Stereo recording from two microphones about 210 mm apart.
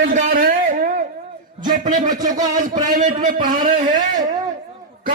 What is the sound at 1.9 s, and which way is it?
A man's voice, 40° right (ahead or behind).